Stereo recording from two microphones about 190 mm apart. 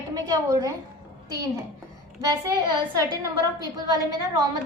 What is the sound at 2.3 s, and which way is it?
A woman's voice, 20° right (ahead or behind).